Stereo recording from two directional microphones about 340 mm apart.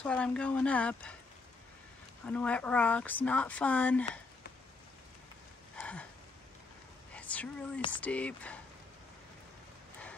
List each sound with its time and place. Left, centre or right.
0.0 s speech: centre
2.2 s speech: centre
5.8 s a sound: centre
7.2 s speech: centre